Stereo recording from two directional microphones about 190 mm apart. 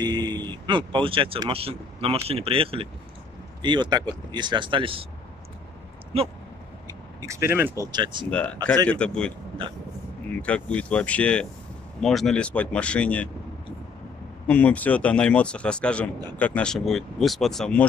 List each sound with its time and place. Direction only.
0.0 s speech: 20° right (ahead or behind)
6.9 s speech: 15° right (ahead or behind)
8.3 s speech: 5° left (ahead or behind)
10.4 s a man's voice: 5° left (ahead or behind)
14.5 s a man's voice: 5° left (ahead or behind)